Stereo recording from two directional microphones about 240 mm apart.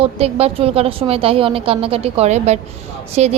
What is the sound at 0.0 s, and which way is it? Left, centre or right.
A woman's voice, right.